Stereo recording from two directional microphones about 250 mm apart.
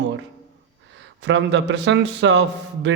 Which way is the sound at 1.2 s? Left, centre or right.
Right.